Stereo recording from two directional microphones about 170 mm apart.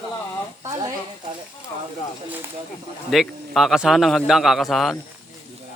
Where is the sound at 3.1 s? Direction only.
Centre (ahead or behind).